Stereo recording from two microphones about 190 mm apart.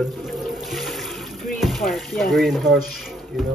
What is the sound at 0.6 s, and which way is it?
Water, centre (ahead or behind).